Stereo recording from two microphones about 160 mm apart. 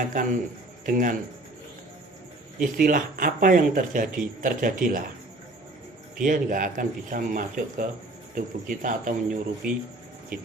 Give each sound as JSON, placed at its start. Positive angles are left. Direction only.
{"t": 0.1, "sound": "a man's voice", "side_deg": -50}
{"t": 2.6, "sound": "speech", "side_deg": -60}
{"t": 6.2, "sound": "speech", "side_deg": -55}